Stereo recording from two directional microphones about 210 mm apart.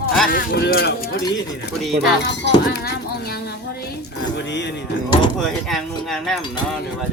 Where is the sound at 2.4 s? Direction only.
50° left (ahead or behind).